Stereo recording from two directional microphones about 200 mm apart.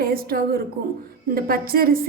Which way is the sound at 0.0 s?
50° right (ahead or behind).